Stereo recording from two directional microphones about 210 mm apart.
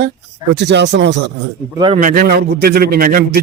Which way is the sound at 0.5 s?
55° right (ahead or behind).